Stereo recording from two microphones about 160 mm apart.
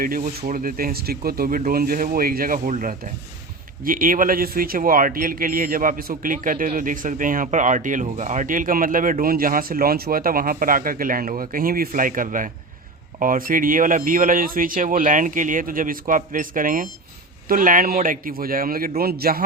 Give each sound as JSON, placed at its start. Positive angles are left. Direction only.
{"t": 0.0, "sound": "speech", "side_deg": -55}
{"t": 8.0, "sound": "speech", "side_deg": -45}